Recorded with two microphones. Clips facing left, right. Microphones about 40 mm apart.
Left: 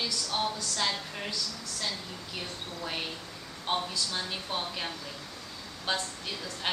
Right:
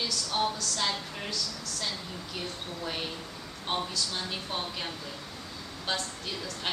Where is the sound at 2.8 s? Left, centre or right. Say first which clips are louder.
Even; centre.